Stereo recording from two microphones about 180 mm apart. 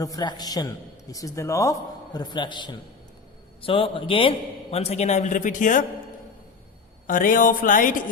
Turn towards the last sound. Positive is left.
turn(degrees=50)  # may be behind; listen again after turning